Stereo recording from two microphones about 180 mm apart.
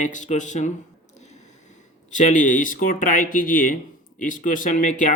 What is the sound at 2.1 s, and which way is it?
Speech, 45° left (ahead or behind).